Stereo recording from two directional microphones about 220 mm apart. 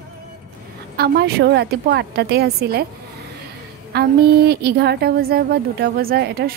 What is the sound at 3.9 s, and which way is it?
A woman's voice, 45° right (ahead or behind).